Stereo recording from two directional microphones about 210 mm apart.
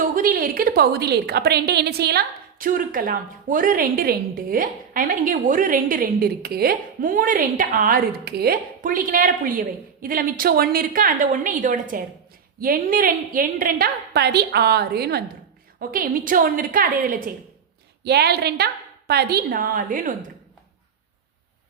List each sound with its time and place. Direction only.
0.0 s a woman's voice: 40° right (ahead or behind)